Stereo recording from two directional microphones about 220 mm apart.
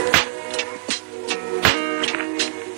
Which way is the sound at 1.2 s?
45° right (ahead or behind).